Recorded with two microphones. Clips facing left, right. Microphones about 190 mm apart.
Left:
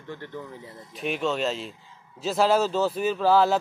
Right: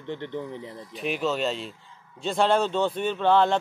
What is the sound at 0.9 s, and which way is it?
A man's voice, centre (ahead or behind).